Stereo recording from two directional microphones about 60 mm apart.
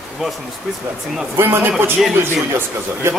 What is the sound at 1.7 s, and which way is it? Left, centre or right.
Speech, centre.